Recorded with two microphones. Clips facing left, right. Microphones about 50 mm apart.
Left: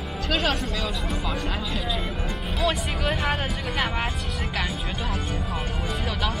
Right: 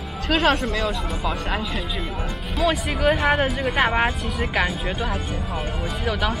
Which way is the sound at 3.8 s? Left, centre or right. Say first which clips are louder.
Right 7 dB; right.